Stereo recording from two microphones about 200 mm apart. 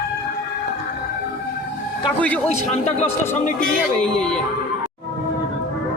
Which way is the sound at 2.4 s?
35° left (ahead or behind).